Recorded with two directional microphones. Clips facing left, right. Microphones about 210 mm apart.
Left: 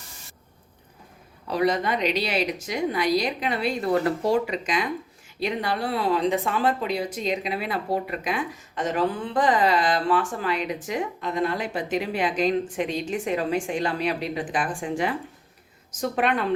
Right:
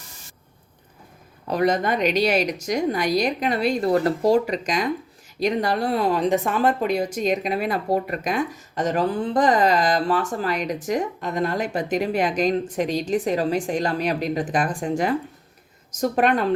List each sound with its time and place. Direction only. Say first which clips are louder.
1.5 s a woman's voice: right 2 dB; 45° right (ahead or behind)